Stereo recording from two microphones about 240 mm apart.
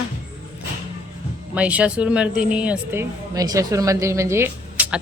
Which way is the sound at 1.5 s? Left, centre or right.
Centre.